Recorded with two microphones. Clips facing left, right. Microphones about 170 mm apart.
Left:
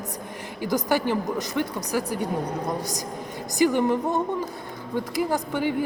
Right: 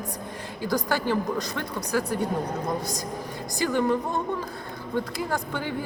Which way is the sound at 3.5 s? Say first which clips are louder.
Left 3 dB; 15° left (ahead or behind).